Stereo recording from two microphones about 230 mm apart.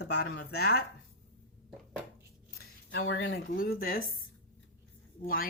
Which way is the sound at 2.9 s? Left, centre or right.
Left.